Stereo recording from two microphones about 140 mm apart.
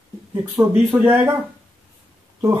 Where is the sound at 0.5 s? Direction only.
10° right (ahead or behind).